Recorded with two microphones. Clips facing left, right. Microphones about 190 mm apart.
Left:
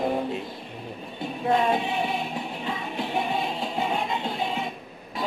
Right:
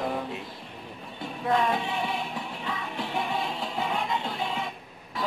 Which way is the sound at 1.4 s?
25° left (ahead or behind).